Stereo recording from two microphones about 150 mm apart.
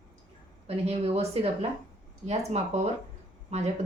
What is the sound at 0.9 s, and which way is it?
A woman's voice, 45° right (ahead or behind).